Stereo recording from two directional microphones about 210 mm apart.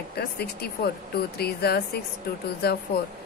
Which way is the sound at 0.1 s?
50° left (ahead or behind).